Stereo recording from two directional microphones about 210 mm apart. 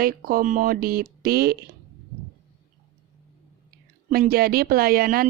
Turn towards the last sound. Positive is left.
turn(degrees=-45)  # may be behind; listen again after turning